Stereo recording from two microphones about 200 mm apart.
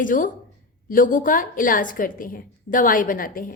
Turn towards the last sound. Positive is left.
turn(degrees=45)  # may be behind; listen again after turning